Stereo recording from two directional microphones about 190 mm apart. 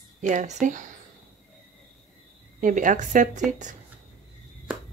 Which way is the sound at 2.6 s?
45° right (ahead or behind).